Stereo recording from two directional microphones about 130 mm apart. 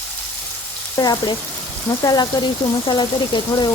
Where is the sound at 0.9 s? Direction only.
30° left (ahead or behind).